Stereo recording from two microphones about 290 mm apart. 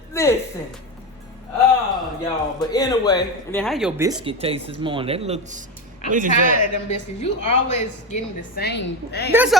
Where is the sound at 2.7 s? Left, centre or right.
Centre.